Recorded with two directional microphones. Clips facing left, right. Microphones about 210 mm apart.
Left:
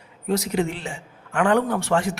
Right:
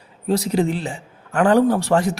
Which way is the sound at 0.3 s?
35° right (ahead or behind).